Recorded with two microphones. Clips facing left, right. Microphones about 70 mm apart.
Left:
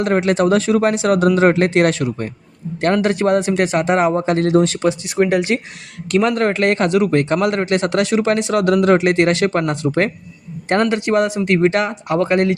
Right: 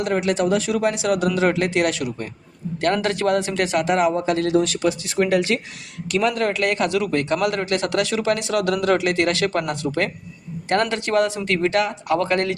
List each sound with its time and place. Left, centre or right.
0.0 s a man's voice: left
2.8 s a man's voice: left
6.1 s a man's voice: left